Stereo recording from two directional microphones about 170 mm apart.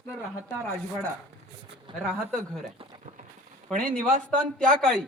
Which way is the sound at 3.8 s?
50° right (ahead or behind).